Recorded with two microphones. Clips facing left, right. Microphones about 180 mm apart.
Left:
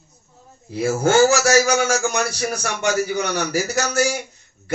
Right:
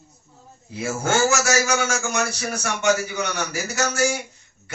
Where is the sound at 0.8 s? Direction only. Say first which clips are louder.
Left 6 dB; 35° left (ahead or behind).